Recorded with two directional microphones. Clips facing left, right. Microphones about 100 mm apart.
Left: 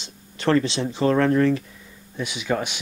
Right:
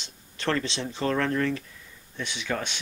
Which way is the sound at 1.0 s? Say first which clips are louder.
Left 7 dB; 20° left (ahead or behind).